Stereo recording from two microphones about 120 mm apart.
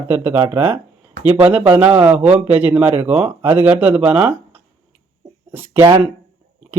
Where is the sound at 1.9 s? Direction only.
40° right (ahead or behind).